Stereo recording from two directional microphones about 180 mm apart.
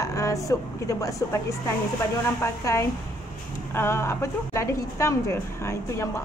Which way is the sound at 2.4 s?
15° left (ahead or behind).